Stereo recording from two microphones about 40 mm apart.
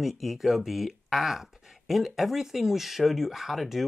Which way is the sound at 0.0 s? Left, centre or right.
Centre.